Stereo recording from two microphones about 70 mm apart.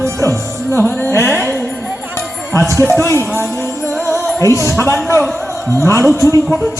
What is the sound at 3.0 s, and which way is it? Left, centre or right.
Speech, left.